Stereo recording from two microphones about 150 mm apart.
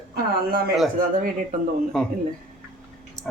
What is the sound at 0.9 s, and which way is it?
Speech, 65° right (ahead or behind).